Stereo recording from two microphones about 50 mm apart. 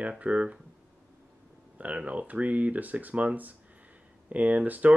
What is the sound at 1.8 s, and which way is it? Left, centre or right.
Speech, right.